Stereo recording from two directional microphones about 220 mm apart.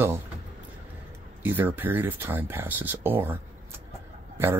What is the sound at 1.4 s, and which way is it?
Speech, 10° right (ahead or behind).